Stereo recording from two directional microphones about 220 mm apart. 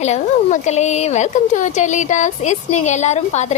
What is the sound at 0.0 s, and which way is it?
A woman's voice, 30° left (ahead or behind).